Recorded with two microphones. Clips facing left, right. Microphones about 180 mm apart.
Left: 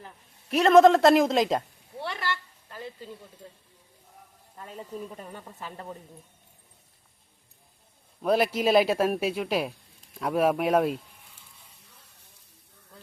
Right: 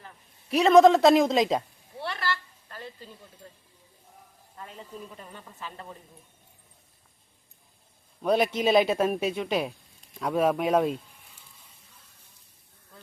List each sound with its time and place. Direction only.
0.4 s speech: centre (ahead or behind)
2.0 s a sound: 15° left (ahead or behind)
8.2 s speech: 5° left (ahead or behind)